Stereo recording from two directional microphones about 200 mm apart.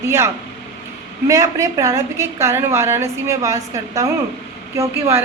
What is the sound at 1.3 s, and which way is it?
A woman's voice, 15° right (ahead or behind).